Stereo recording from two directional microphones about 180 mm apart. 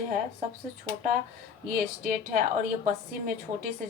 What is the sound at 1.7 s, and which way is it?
A woman's voice, 50° right (ahead or behind).